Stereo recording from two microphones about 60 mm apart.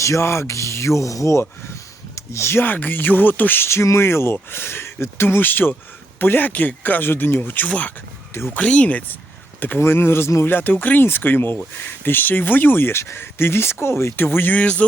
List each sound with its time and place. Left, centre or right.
0.0 s speech: left
2.6 s speech: left
3.9 s speech: left
9.6 s speech: left
10.5 s speech: left